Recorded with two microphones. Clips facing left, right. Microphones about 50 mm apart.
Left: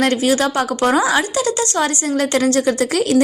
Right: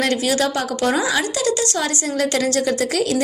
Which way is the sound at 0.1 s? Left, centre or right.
Left.